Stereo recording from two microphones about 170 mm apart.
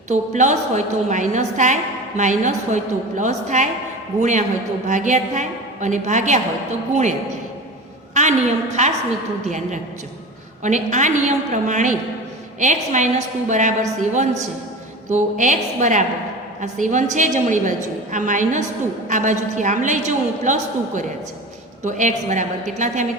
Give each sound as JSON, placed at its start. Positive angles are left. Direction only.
{"t": 0.1, "sound": "a woman's voice", "side_deg": -45}
{"t": 8.1, "sound": "a woman's voice", "side_deg": -45}
{"t": 10.6, "sound": "a woman's voice", "side_deg": -45}